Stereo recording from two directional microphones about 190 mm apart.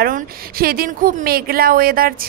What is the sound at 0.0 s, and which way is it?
Speech, 50° right (ahead or behind).